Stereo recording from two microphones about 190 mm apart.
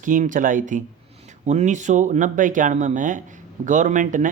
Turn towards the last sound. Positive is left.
turn(degrees=-40)  # may be behind; listen again after turning